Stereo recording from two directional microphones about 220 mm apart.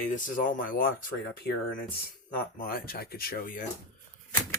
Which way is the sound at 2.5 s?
40° left (ahead or behind).